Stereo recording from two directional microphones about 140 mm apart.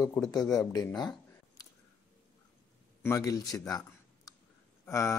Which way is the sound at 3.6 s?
25° left (ahead or behind).